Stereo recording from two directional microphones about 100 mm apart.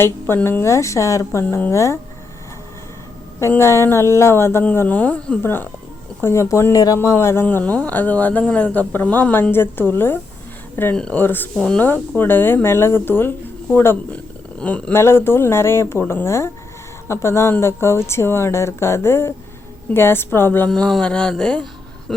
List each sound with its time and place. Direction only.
0.4 s speech: 25° left (ahead or behind)
3.6 s speech: 25° left (ahead or behind)
10.9 s speech: 10° left (ahead or behind)
11.2 s speech: 20° left (ahead or behind)
11.6 s speech: 10° left (ahead or behind)
12.1 s speech: 20° left (ahead or behind)
14.9 s speech: 25° left (ahead or behind)
20.7 s speech: 5° left (ahead or behind)